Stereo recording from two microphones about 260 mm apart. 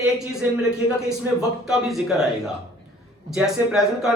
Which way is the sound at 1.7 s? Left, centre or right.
Centre.